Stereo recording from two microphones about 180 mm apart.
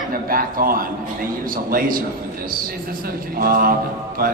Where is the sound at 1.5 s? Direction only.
50° right (ahead or behind).